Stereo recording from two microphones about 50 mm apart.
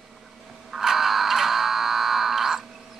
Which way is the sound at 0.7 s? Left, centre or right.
Centre.